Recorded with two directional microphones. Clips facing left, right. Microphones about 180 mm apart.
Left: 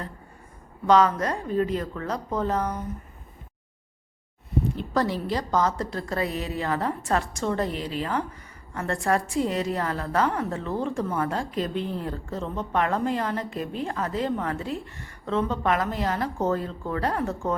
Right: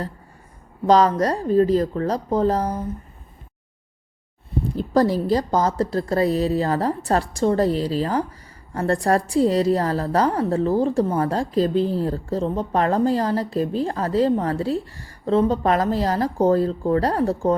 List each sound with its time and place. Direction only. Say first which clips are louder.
0.9 s a woman's voice: right 4 dB; 35° right (ahead or behind)
4.7 s a woman's voice: right 10 dB; 35° right (ahead or behind)